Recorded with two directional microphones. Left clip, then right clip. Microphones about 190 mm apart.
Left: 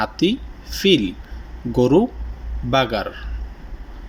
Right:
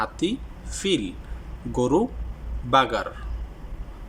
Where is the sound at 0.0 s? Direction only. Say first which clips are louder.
Left 6 dB; centre (ahead or behind).